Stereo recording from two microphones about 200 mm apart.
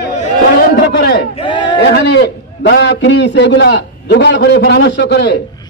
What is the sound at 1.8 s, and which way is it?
A man's voice, 60° left (ahead or behind).